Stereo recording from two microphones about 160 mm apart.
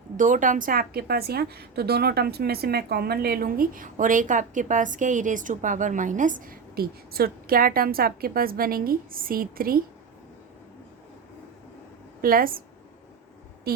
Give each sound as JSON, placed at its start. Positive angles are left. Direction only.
{"t": 0.2, "sound": "a woman's voice", "side_deg": -55}
{"t": 12.2, "sound": "a woman's voice", "side_deg": -65}
{"t": 13.7, "sound": "a sound", "side_deg": -80}